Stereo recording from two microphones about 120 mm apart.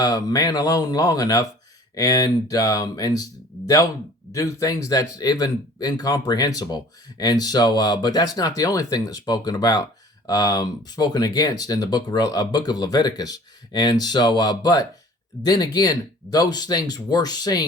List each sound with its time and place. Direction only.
0.0 s speech: 30° left (ahead or behind)
4.3 s speech: 25° left (ahead or behind)